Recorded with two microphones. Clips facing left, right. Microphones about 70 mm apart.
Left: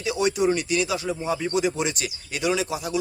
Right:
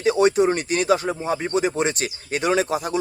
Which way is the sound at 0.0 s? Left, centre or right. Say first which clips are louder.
Right 5 dB; right.